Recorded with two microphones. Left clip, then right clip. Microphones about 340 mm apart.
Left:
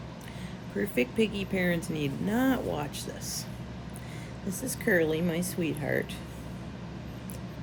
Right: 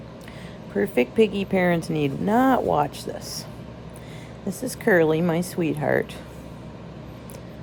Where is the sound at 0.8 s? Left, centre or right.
Centre.